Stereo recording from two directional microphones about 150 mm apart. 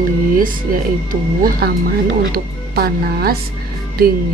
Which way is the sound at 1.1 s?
75° right (ahead or behind).